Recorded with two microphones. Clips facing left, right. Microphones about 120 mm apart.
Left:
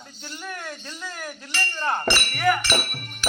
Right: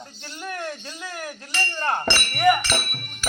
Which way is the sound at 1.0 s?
15° right (ahead or behind).